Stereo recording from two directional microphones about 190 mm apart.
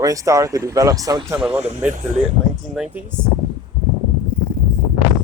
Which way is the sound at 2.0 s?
40° right (ahead or behind).